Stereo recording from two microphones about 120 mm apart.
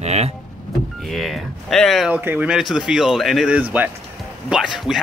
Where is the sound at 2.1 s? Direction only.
15° right (ahead or behind).